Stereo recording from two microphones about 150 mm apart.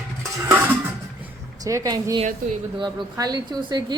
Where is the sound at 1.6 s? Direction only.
25° right (ahead or behind).